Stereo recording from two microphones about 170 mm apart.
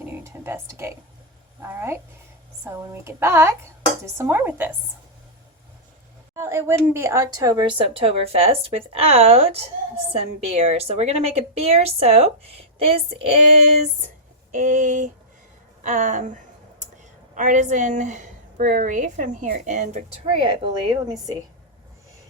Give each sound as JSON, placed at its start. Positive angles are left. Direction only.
{"t": 0.1, "sound": "speech", "side_deg": -15}
{"t": 6.3, "sound": "a woman's voice", "side_deg": -15}
{"t": 14.5, "sound": "a woman's voice", "side_deg": -50}
{"t": 20.4, "sound": "a woman's voice", "side_deg": -30}